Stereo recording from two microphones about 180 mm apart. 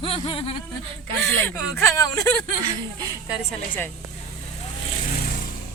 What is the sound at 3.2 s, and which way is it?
Speech, 5° right (ahead or behind).